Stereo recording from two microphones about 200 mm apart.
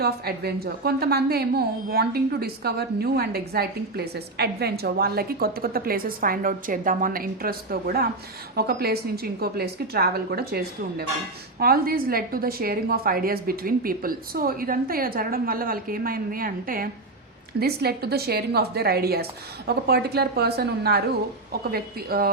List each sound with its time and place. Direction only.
0.0 s a woman's voice: 50° right (ahead or behind)